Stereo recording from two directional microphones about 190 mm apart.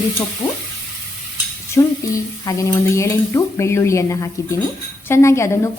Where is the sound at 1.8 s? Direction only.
20° left (ahead or behind).